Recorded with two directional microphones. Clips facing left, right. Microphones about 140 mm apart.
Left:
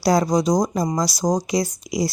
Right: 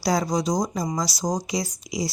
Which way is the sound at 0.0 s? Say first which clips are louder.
Left 5 dB; 55° left (ahead or behind).